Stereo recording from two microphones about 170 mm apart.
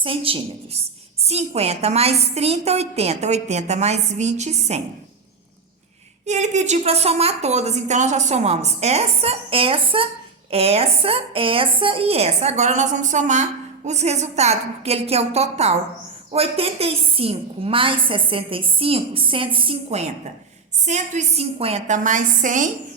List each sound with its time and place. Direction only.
0.0 s a woman's voice: 30° right (ahead or behind)
6.2 s a woman's voice: 45° right (ahead or behind)